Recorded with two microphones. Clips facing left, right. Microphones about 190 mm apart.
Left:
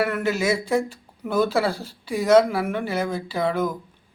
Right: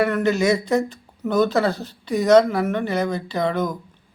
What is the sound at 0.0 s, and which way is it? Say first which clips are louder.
Speech: right 4 dB; 5° left (ahead or behind).